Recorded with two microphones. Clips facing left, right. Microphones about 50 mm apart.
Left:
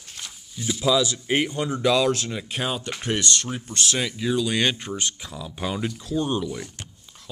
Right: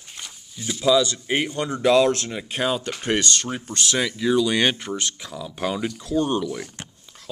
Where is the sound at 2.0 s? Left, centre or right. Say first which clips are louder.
Right 4 dB; centre.